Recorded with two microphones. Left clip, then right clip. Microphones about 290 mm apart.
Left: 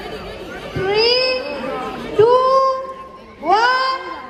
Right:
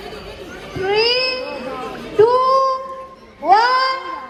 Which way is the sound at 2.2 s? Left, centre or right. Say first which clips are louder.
Left 1 dB; right.